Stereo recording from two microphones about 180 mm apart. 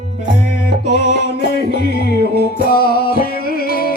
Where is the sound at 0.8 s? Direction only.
70° left (ahead or behind).